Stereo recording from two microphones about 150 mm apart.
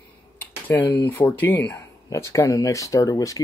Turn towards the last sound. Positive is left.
turn(degrees=25)  # may be behind; listen again after turning